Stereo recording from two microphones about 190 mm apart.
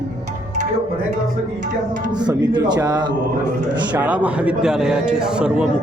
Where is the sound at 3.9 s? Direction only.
5° right (ahead or behind).